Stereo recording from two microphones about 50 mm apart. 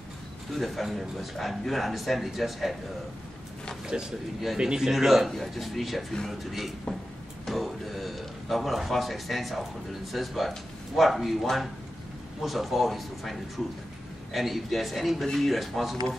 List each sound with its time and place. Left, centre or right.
0.6 s speech: centre
3.9 s a man's voice: centre
7.4 s a sound: centre
10.1 s speech: centre